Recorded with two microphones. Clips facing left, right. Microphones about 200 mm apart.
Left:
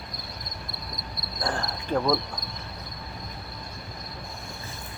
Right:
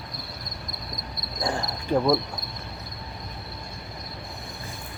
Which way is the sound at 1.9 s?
5° right (ahead or behind).